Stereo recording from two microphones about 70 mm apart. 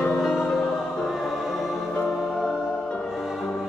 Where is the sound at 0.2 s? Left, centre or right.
Centre.